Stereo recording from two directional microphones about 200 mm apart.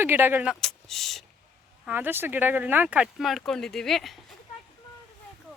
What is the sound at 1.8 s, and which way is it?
Speech, 10° right (ahead or behind).